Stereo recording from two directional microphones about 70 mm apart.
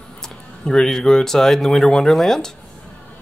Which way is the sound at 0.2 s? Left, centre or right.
Centre.